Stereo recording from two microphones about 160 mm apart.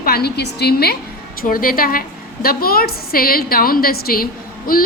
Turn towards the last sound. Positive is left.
turn(degrees=65)  # may be behind; listen again after turning